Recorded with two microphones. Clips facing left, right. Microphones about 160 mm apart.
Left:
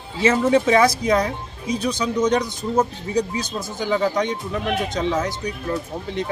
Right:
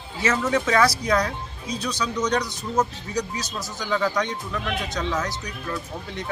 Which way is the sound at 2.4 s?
50° left (ahead or behind).